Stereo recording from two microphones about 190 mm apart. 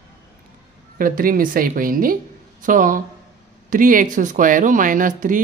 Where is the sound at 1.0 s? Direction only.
50° right (ahead or behind).